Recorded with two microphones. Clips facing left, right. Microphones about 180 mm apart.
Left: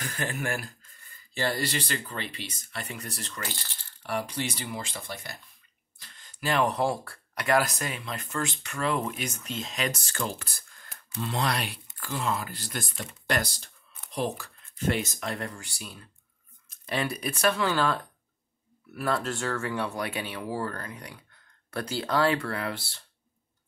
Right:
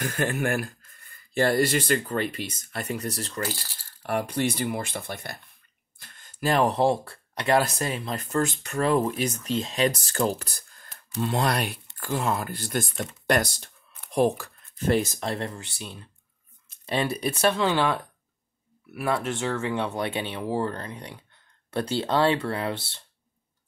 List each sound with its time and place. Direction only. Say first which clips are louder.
0.0 s speech: right 6 dB; 50° right (ahead or behind)
4.0 s speech: right 5 dB; 50° right (ahead or behind); by 18.0 s 15° right (ahead or behind)
18.9 s speech: right 2 dB; 5° right (ahead or behind)
19.3 s speech: right 3 dB; 20° right (ahead or behind)